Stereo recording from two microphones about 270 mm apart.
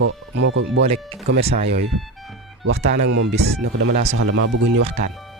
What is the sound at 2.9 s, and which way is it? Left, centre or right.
Speech, right.